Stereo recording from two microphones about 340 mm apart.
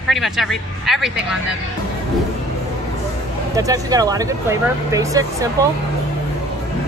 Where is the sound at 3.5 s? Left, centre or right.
Centre.